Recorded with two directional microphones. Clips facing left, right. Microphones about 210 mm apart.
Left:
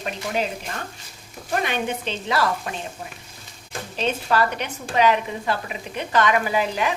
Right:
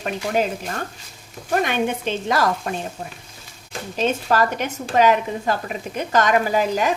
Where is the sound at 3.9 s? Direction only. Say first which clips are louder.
Right 2 dB; 45° right (ahead or behind).